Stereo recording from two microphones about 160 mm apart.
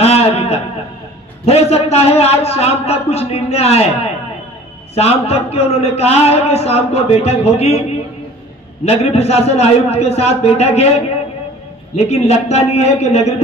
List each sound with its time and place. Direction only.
0.0 s a sound: 40° left (ahead or behind)
1.4 s a man's voice: 40° left (ahead or behind)
8.8 s a man's voice: 40° left (ahead or behind)